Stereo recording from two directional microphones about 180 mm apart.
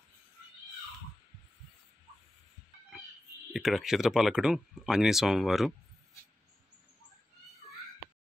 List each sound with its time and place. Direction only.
3.5 s speech: centre (ahead or behind)